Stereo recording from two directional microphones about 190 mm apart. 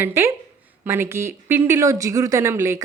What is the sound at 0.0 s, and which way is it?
A woman's voice, 10° right (ahead or behind).